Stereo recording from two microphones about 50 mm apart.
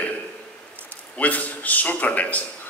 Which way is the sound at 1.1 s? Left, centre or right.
Left.